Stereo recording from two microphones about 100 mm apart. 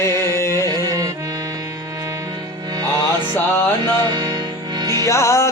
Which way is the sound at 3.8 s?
45° right (ahead or behind).